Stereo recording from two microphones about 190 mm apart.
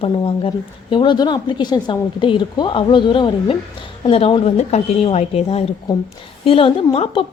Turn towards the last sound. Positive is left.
turn(degrees=30)  # may be behind; listen again after turning